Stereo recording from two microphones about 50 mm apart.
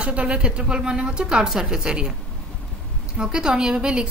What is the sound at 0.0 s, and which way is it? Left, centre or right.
A woman's voice, right.